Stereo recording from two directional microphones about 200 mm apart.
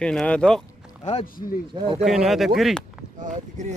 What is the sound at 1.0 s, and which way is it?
Speech, 30° left (ahead or behind).